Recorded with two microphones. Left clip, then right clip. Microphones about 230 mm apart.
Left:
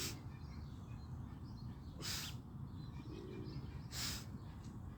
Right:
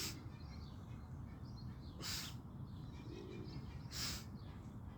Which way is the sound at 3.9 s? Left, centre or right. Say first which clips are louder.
Even; centre.